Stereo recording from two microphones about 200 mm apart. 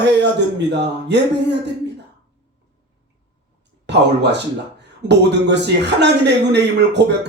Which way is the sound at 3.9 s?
60° right (ahead or behind).